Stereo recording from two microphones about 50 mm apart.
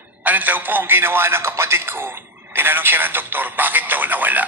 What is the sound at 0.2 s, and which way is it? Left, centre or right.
A man's voice, right.